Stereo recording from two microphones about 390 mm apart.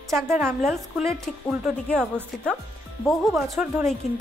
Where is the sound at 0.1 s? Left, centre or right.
Centre.